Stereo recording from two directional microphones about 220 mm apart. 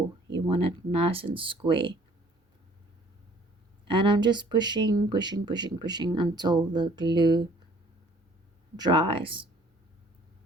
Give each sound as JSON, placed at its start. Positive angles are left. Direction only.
{"t": 0.3, "sound": "speech", "side_deg": -25}
{"t": 3.8, "sound": "speech", "side_deg": -20}
{"t": 8.7, "sound": "speech", "side_deg": -20}